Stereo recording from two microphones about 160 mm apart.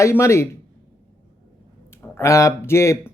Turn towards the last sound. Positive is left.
turn(degrees=15)  # may be behind; listen again after turning